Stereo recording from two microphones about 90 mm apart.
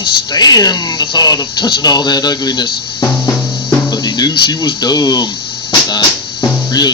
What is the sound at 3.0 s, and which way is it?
Music, 35° left (ahead or behind).